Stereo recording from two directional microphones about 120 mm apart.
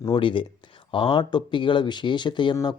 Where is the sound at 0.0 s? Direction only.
45° left (ahead or behind).